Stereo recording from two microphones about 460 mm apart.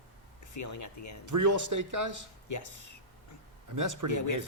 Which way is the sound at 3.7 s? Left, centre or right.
Right.